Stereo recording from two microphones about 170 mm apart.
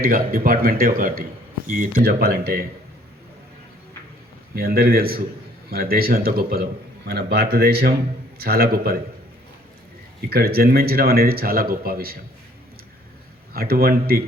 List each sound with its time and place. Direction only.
0.0 s a man's voice: 60° right (ahead or behind)
4.5 s a man's voice: 60° right (ahead or behind)
10.2 s a man's voice: 65° right (ahead or behind)
13.5 s a man's voice: 60° right (ahead or behind)